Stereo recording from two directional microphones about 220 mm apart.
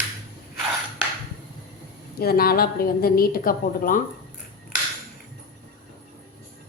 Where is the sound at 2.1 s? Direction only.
45° left (ahead or behind).